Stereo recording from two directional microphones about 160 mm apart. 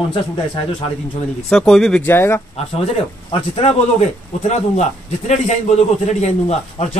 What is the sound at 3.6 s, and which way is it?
A man's voice, 40° left (ahead or behind).